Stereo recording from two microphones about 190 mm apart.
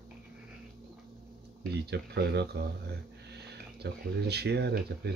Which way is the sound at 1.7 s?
60° right (ahead or behind).